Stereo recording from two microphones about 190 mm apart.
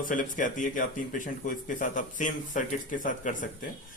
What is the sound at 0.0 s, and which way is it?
Speech, 45° left (ahead or behind).